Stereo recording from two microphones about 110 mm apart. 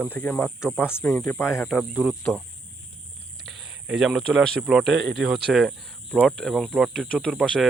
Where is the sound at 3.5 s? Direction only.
Centre (ahead or behind).